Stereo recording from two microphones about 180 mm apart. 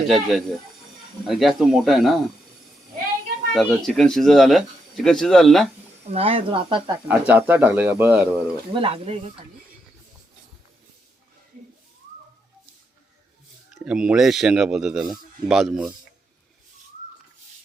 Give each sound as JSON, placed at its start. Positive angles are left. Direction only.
{"t": 0.1, "sound": "speech", "side_deg": 0}
{"t": 3.5, "sound": "speech", "side_deg": 0}
{"t": 6.1, "sound": "speech", "side_deg": -35}
{"t": 7.1, "sound": "speech", "side_deg": -10}
{"t": 8.7, "sound": "speech", "side_deg": -30}
{"t": 13.8, "sound": "speech", "side_deg": -5}